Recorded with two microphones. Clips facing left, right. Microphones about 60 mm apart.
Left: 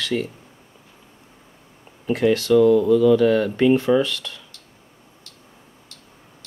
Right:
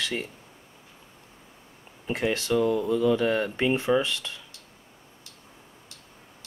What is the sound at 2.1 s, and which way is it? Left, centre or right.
Speech, right.